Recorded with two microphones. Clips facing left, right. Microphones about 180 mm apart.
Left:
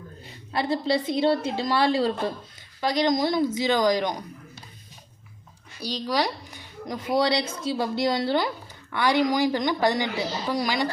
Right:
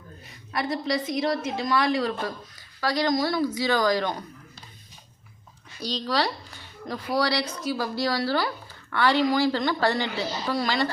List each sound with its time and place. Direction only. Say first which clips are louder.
0.5 s a woman's voice: left 3 dB; 25° left (ahead or behind)
5.8 s speech: even; 10° left (ahead or behind)